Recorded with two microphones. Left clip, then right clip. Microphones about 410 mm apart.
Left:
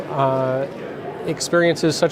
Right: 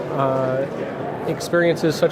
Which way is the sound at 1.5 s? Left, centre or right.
Left.